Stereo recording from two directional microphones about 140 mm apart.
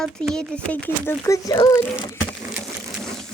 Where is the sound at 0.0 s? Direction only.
5° left (ahead or behind).